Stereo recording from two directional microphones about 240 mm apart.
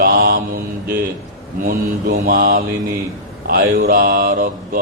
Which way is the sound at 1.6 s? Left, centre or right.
Right.